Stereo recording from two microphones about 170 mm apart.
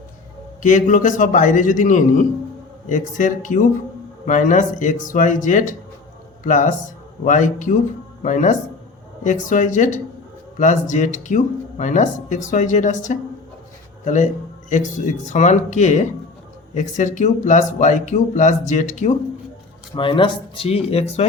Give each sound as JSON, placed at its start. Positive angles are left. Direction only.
{"t": 0.6, "sound": "speech", "side_deg": 50}
{"t": 20.0, "sound": "speech", "side_deg": 30}